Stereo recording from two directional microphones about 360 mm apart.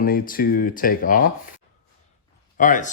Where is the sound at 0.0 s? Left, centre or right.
Left.